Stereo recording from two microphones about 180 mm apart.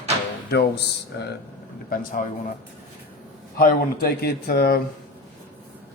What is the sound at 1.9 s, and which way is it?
Speech, 50° left (ahead or behind).